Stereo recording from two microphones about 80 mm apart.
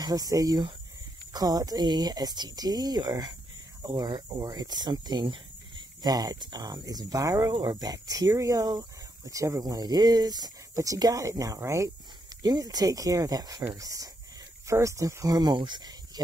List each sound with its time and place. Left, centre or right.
0.0 s speech: right
4.4 s speech: right
6.0 s speech: right
12.4 s speech: right
15.5 s speech: right